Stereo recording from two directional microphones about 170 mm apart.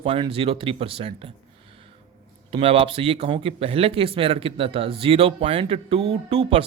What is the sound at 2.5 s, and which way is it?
Speech, 35° right (ahead or behind).